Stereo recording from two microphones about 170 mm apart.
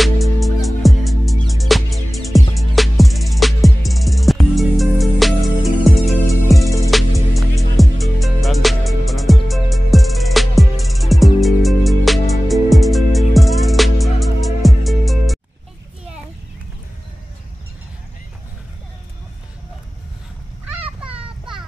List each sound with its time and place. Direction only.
0.0 s music: centre (ahead or behind)
6.1 s music: 15° left (ahead or behind)
7.3 s music: centre (ahead or behind)